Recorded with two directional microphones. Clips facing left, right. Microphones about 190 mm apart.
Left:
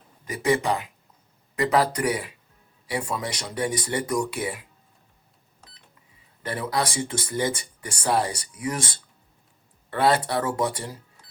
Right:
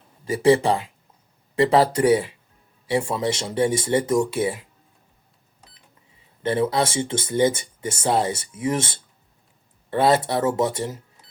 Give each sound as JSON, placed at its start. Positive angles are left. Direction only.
{"t": 0.3, "sound": "speech", "side_deg": -30}
{"t": 6.4, "sound": "speech", "side_deg": -25}